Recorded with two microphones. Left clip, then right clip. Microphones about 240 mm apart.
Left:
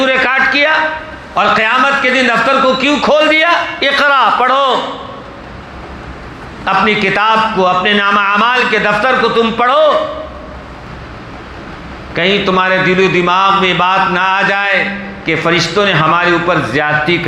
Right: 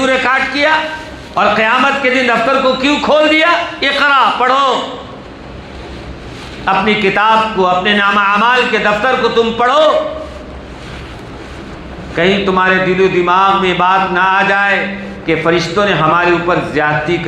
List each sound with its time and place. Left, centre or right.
0.0 s a sound: left
1.4 s a man's voice: left
6.7 s a man's voice: left
12.1 s a man's voice: left